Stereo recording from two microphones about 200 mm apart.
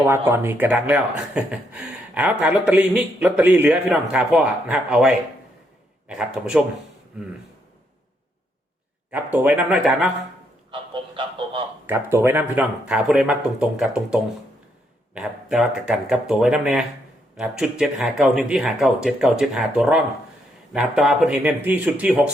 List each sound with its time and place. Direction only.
0.3 s speech: 10° right (ahead or behind)
9.0 s speech: 10° right (ahead or behind)
10.7 s speech: 25° right (ahead or behind)
11.9 s speech: 10° right (ahead or behind)